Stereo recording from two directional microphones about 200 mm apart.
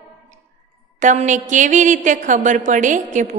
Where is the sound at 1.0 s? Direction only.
40° right (ahead or behind).